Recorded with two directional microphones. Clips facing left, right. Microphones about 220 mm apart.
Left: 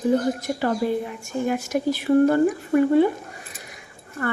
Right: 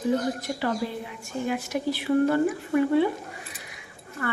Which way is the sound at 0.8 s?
50° left (ahead or behind).